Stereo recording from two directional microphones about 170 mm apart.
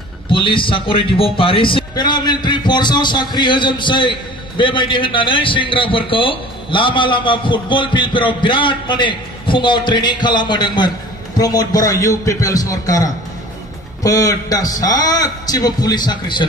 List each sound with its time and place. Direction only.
0.3 s a man's voice: 30° left (ahead or behind)